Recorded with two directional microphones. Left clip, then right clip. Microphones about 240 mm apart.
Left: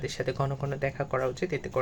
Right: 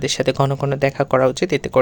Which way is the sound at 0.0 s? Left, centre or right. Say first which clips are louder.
Right 13 dB; right.